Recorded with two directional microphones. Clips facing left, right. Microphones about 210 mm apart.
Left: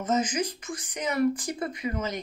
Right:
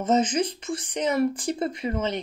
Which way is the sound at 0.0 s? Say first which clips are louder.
Right 4 dB; 30° right (ahead or behind).